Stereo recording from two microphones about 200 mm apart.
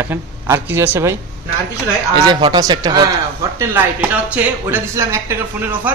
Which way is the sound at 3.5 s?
10° right (ahead or behind).